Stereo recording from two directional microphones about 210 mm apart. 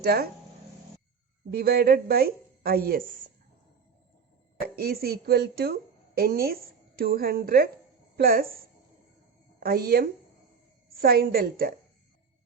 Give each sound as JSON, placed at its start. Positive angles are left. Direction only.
{"t": 0.0, "sound": "a woman's voice", "side_deg": -45}
{"t": 1.5, "sound": "a woman's voice", "side_deg": -45}
{"t": 4.6, "sound": "a woman's voice", "side_deg": -50}
{"t": 9.6, "sound": "a woman's voice", "side_deg": -45}